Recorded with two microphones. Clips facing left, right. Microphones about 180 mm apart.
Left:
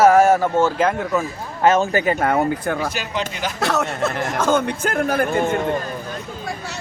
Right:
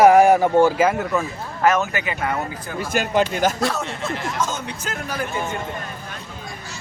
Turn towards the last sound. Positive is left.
turn(degrees=55)  # may be behind; listen again after turning